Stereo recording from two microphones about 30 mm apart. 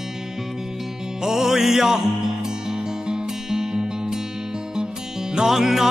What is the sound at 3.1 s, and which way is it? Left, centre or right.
Music, right.